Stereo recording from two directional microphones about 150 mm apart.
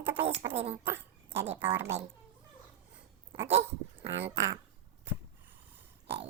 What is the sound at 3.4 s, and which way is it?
Dog, 15° right (ahead or behind).